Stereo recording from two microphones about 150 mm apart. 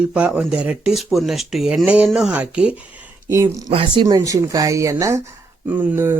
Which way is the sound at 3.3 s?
20° right (ahead or behind).